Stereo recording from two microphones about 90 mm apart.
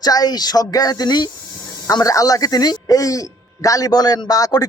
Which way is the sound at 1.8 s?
40° left (ahead or behind).